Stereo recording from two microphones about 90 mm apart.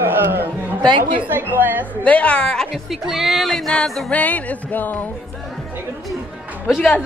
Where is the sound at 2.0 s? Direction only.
15° left (ahead or behind).